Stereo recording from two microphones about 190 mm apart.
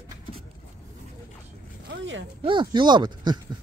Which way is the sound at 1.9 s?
80° right.